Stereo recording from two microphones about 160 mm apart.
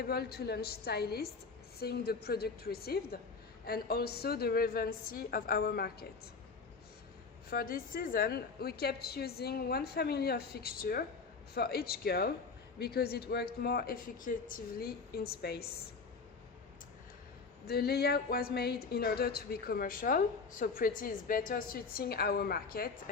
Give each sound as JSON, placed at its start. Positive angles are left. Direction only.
{"t": 0.1, "sound": "a woman's voice", "side_deg": 80}
{"t": 7.5, "sound": "a woman's voice", "side_deg": 65}
{"t": 17.7, "sound": "speech", "side_deg": 80}